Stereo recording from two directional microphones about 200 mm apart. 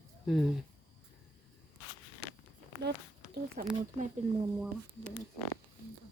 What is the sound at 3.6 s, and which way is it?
Speech, 45° right (ahead or behind).